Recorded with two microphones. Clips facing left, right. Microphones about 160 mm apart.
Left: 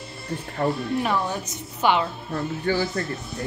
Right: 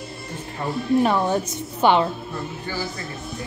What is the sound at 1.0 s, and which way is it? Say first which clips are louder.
A woman's voice: right 5 dB; 30° right (ahead or behind).